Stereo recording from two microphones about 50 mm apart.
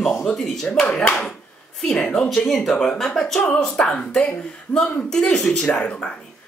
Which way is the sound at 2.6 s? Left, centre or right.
Centre.